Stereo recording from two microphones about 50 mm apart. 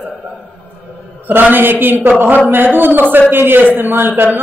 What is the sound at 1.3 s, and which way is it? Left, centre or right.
A man's voice, right.